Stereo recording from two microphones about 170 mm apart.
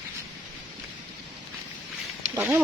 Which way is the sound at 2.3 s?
10° right (ahead or behind).